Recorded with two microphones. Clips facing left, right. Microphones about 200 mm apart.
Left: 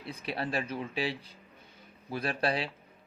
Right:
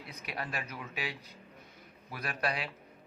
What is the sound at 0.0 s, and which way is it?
Speech, 30° left (ahead or behind).